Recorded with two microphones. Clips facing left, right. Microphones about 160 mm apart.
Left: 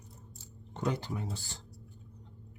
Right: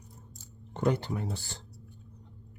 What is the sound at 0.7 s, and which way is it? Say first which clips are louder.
Speech: right 5 dB; 60° right (ahead or behind).